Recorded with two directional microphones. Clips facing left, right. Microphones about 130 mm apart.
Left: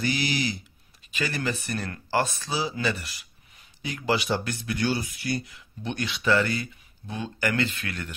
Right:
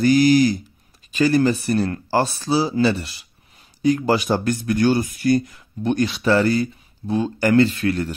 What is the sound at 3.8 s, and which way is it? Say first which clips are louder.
Speech: right 9 dB; 40° right (ahead or behind).